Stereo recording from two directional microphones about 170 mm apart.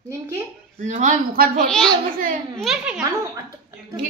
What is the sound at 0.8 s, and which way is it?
Speech, 45° right (ahead or behind).